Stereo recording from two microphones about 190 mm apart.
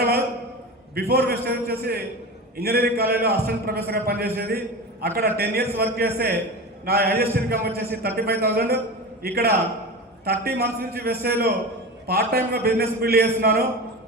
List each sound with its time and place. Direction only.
0.9 s a man's voice: 55° right (ahead or behind)